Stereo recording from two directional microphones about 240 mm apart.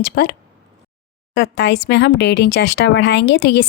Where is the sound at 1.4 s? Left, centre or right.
Left.